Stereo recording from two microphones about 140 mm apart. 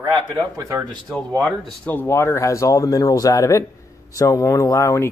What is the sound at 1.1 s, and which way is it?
Speech, 5° left (ahead or behind).